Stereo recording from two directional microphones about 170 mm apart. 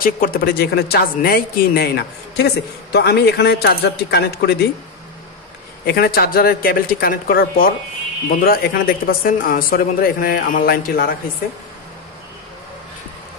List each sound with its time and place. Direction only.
0.0 s a man's voice: 60° left (ahead or behind)
5.9 s speech: 65° left (ahead or behind)